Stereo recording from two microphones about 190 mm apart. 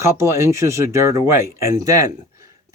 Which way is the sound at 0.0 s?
15° right (ahead or behind).